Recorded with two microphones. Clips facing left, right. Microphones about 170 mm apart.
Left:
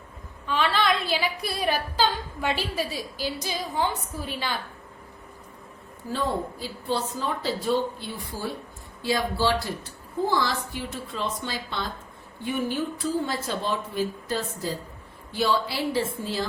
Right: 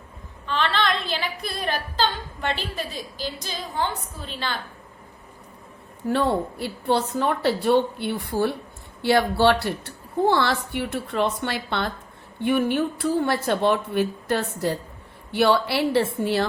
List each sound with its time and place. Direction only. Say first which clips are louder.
0.4 s a woman's voice: even; 10° left (ahead or behind)
6.1 s a woman's voice: right 6 dB; 65° right (ahead or behind)